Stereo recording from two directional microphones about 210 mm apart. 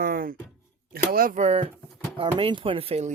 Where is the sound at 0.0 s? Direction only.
45° right (ahead or behind).